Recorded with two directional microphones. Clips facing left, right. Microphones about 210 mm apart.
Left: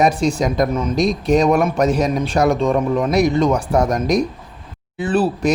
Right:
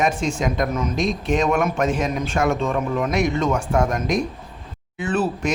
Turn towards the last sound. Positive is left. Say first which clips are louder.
# left 5 dB
turn(degrees=35)  # may be behind; listen again after turning